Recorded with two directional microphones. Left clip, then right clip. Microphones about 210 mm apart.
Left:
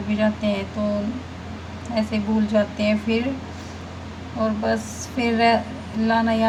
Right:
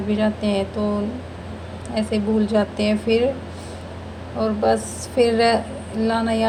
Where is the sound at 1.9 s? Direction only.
20° right (ahead or behind).